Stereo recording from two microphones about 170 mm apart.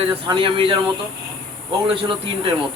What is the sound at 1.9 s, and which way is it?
Speech, 30° right (ahead or behind).